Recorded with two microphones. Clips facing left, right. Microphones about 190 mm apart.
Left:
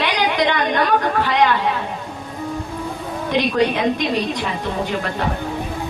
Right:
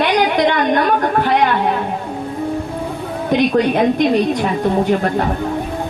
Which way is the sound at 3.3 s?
50° right (ahead or behind).